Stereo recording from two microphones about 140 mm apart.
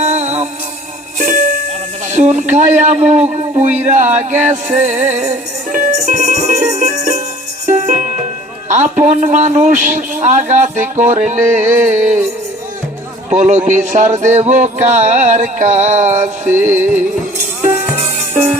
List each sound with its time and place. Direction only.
0.0 s music: 55° right (ahead or behind)
1.2 s jingle bell: 70° right (ahead or behind)
2.0 s a man's voice: 60° right (ahead or behind)
7.9 s music: 65° right (ahead or behind)
8.7 s a man's voice: 60° right (ahead or behind)
13.3 s a man's voice: 55° right (ahead or behind)
16.7 s music: 15° right (ahead or behind)